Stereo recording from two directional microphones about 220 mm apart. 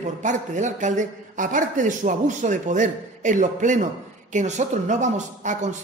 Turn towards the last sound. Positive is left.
turn(degrees=-35)  # may be behind; listen again after turning